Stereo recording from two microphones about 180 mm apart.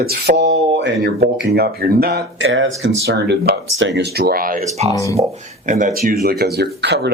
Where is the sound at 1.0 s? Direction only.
60° right (ahead or behind); by 2.9 s 90° right.